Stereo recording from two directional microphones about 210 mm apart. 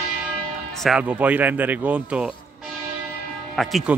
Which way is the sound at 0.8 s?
5° right (ahead or behind).